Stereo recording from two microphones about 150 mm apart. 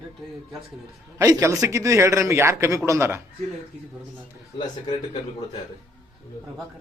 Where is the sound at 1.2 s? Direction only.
20° right (ahead or behind).